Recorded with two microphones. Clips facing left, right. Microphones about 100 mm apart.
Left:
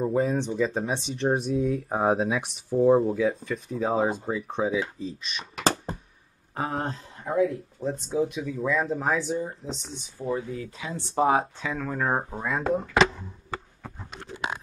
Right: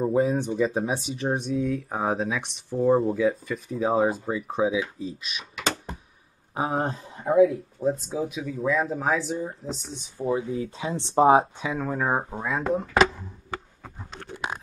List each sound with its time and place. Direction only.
0.0 s speech: 10° right (ahead or behind)
5.4 s a sound: 35° left (ahead or behind)
6.5 s speech: 5° right (ahead or behind)
7.3 s speech: 5° right (ahead or behind)
10.1 s speech: 25° right (ahead or behind)
11.6 s speech: 15° right (ahead or behind)